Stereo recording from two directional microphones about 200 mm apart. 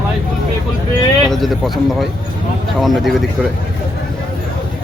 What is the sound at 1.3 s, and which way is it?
Speech, centre (ahead or behind).